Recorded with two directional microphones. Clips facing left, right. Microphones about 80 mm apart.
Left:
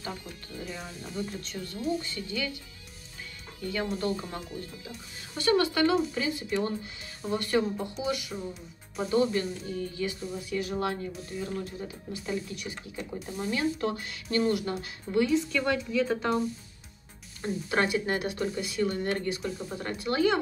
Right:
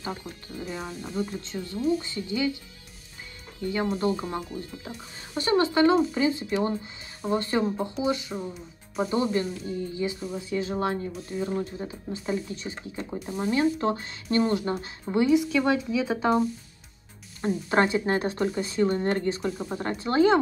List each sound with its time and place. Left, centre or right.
0.0 s speech: right
3.6 s speech: right
15.2 s a woman's voice: centre
17.4 s speech: right